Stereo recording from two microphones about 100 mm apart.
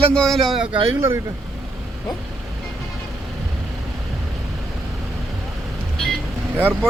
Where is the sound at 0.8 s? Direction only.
25° right (ahead or behind).